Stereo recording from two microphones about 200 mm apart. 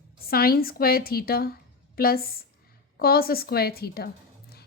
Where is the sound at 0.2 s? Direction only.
50° left (ahead or behind).